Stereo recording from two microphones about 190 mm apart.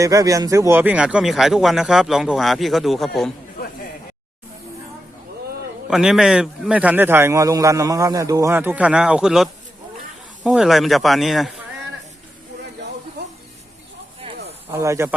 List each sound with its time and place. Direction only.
0.0 s speech: 20° right (ahead or behind); by 3.1 s centre (ahead or behind)
5.9 s a man's voice: 5° right (ahead or behind)
14.2 s a sound: 30° right (ahead or behind)
14.7 s a man's voice: 15° right (ahead or behind)